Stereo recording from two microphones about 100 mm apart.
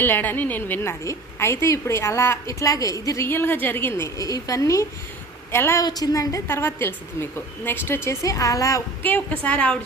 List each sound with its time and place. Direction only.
0.0 s a woman's voice: 20° left (ahead or behind)
1.0 s a woman's voice: 30° left (ahead or behind)
4.2 s a woman's voice: 35° left (ahead or behind)
5.8 s a woman's voice: 40° left (ahead or behind)
6.5 s a woman's voice: 25° left (ahead or behind)
9.0 s a woman's voice: 15° left (ahead or behind)